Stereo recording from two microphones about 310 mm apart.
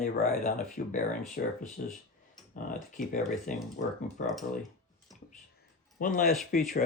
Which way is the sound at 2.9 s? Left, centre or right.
Left.